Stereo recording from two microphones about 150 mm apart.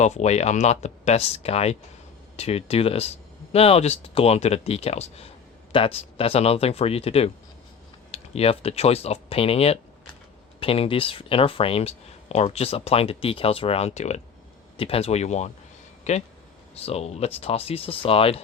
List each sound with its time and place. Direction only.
0.0 s speech: 50° left (ahead or behind)